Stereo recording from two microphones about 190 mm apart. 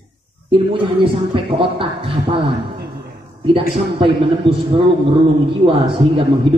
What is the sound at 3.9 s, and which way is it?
A man's voice, 25° right (ahead or behind).